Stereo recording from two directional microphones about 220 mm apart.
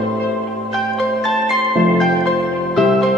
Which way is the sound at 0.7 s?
Centre (ahead or behind).